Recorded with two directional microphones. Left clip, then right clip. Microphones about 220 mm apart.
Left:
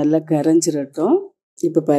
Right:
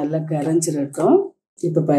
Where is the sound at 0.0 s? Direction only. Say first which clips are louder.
Left 6 dB; 50° left (ahead or behind).